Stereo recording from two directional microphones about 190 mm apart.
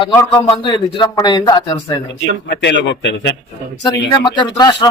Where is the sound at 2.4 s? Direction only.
65° left (ahead or behind).